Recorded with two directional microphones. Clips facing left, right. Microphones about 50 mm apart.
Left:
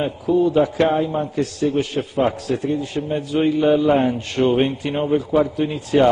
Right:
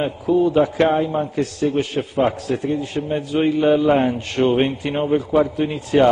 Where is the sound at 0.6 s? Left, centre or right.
Right.